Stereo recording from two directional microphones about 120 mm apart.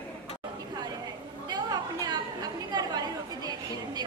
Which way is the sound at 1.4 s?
35° right (ahead or behind).